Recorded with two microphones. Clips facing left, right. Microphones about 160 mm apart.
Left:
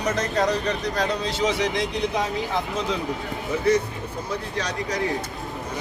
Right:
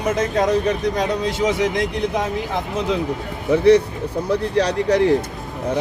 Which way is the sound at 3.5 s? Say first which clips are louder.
Right 8 dB; 75° right (ahead or behind).